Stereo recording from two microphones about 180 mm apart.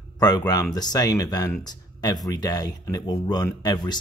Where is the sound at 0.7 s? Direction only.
20° left (ahead or behind).